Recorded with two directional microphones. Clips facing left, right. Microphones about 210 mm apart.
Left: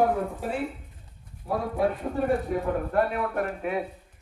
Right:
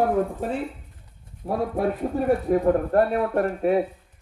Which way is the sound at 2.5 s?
40° right (ahead or behind).